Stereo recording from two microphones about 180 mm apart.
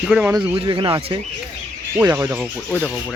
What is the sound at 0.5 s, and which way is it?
Speech, 25° right (ahead or behind).